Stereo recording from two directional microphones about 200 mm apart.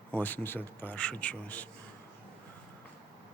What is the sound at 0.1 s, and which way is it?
Speech, 10° left (ahead or behind).